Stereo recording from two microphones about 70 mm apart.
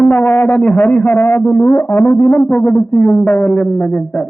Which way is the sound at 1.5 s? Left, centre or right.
Left.